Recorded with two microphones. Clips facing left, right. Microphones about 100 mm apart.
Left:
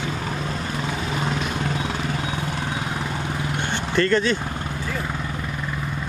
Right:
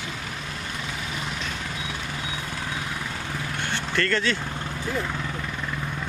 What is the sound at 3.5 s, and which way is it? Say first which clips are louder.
Vehicle: left 4 dB; 15° left (ahead or behind).